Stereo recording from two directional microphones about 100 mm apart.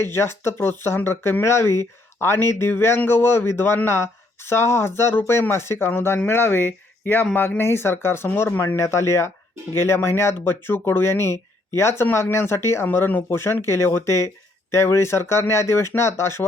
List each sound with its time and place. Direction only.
0.0 s a man's voice: 25° left (ahead or behind)